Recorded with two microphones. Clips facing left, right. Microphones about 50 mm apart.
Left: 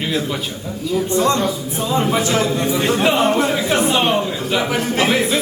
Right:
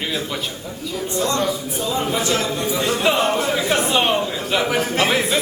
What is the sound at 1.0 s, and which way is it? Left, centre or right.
Speech, left.